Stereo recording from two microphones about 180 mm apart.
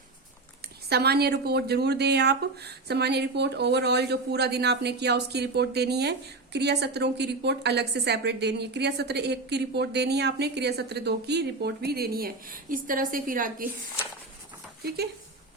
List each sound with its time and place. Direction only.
0.9 s a woman's voice: 65° right (ahead or behind)
14.8 s speech: 60° right (ahead or behind)